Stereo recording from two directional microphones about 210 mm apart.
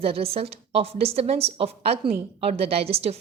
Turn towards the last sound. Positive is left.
turn(degrees=-30)  # may be behind; listen again after turning